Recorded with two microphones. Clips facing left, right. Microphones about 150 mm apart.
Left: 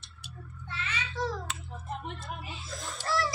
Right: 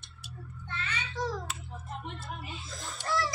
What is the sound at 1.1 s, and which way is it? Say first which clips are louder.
Speech: left 1 dB; 15° right (ahead or behind).